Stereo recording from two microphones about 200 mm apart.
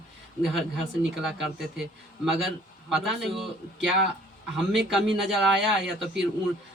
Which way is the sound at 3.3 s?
Centre (ahead or behind).